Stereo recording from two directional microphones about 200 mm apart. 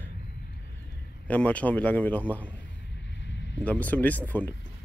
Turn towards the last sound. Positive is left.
turn(degrees=10)  # may be behind; listen again after turning